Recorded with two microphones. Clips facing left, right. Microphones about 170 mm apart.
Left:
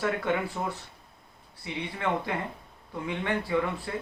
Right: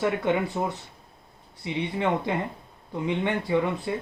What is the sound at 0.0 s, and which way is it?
Speech, 20° right (ahead or behind).